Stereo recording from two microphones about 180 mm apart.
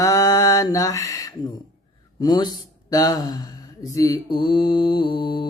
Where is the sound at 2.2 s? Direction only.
25° left (ahead or behind).